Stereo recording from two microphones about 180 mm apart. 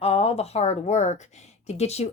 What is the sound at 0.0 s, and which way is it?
Speech, 35° left (ahead or behind).